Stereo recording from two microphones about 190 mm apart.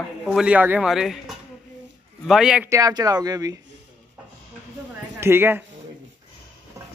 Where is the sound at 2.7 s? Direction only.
20° right (ahead or behind).